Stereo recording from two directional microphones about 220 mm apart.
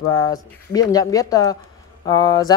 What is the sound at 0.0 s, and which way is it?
Speech, 15° left (ahead or behind).